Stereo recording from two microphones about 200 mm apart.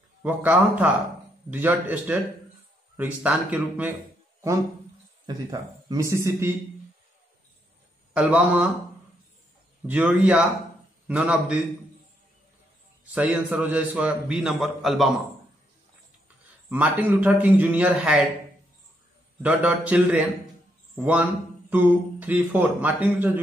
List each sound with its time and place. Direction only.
0.2 s speech: 10° right (ahead or behind)
5.2 s speech: 20° right (ahead or behind)
8.1 s a man's voice: 5° right (ahead or behind)
9.8 s a man's voice: 5° right (ahead or behind)
13.0 s a man's voice: 5° right (ahead or behind)
16.6 s speech: 10° right (ahead or behind)
19.4 s speech: 5° right (ahead or behind)